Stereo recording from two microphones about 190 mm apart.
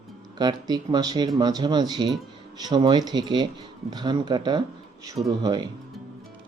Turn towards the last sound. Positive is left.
turn(degrees=-20)  # may be behind; listen again after turning